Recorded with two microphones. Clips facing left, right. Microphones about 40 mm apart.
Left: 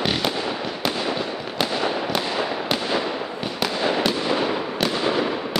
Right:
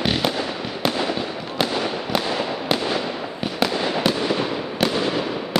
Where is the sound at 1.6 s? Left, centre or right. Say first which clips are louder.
Even; centre.